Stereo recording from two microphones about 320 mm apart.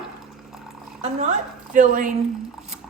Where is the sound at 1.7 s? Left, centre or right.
Right.